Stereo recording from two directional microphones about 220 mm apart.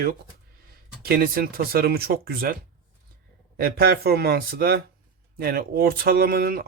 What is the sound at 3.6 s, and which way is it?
Speech, 45° right (ahead or behind).